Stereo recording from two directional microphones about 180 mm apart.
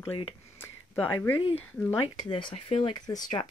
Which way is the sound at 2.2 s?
25° left (ahead or behind).